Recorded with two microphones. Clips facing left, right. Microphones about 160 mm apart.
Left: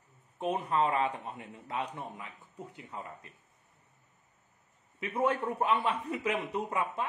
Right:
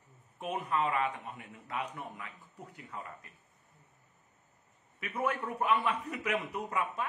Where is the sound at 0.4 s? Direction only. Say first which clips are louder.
Left 3 dB; 30° left (ahead or behind).